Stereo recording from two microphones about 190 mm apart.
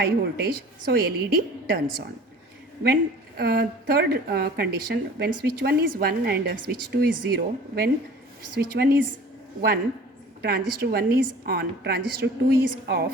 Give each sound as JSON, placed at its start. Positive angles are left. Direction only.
{"t": 0.0, "sound": "a woman's voice", "side_deg": -55}
{"t": 2.8, "sound": "a woman's voice", "side_deg": -55}